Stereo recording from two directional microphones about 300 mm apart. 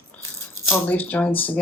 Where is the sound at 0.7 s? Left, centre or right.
Centre.